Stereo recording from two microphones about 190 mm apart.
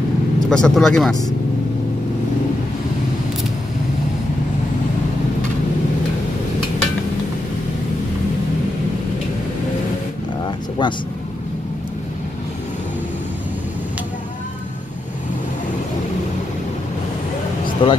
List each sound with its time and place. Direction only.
0.5 s speech: 5° left (ahead or behind)
10.8 s speech: 25° left (ahead or behind)
17.8 s speech: 25° left (ahead or behind)